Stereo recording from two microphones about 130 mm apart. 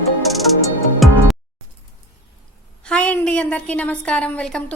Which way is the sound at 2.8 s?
10° left (ahead or behind).